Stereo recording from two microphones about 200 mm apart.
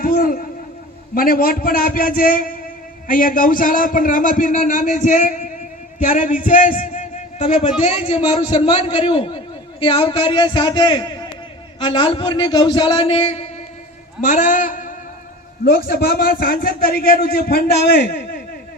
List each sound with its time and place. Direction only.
0.0 s a man's voice: 45° left (ahead or behind)